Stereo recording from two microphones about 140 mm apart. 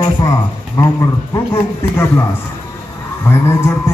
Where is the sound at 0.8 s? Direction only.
20° left (ahead or behind).